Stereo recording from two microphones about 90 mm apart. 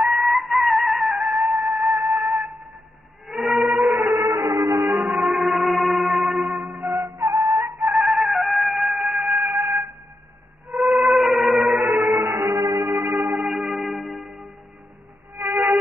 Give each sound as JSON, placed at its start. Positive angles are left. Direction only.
{"t": 0.0, "sound": "music", "side_deg": 0}
{"t": 3.3, "sound": "whale vocalization", "side_deg": 0}
{"t": 4.1, "sound": "music", "side_deg": -45}
{"t": 4.9, "sound": "gong", "side_deg": -10}
{"t": 5.2, "sound": "music", "side_deg": 0}
{"t": 7.2, "sound": "music", "side_deg": -30}
{"t": 7.8, "sound": "music", "side_deg": 0}
{"t": 11.8, "sound": "music", "side_deg": -20}
{"t": 12.1, "sound": "music", "side_deg": -35}
{"t": 13.0, "sound": "a sound", "side_deg": 0}
{"t": 15.4, "sound": "music", "side_deg": -40}